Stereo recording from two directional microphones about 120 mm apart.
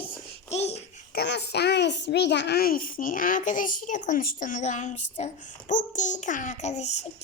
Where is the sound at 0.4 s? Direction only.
65° left (ahead or behind).